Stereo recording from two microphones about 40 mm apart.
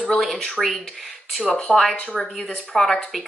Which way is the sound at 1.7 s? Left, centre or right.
Centre.